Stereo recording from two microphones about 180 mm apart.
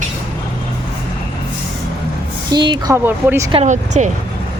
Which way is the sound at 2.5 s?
25° right (ahead or behind).